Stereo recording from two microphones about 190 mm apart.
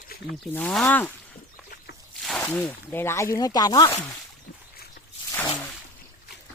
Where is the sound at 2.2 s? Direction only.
5° left (ahead or behind).